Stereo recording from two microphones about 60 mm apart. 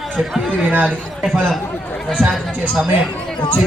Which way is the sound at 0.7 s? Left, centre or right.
Right.